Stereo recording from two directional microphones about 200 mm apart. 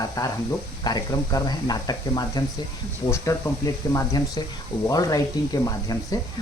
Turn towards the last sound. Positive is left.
turn(degrees=20)  # may be behind; listen again after turning